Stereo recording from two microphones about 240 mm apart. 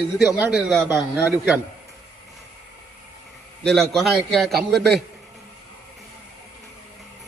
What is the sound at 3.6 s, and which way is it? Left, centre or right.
Speech, centre.